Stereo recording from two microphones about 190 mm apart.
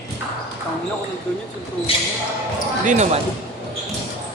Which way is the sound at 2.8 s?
35° right (ahead or behind).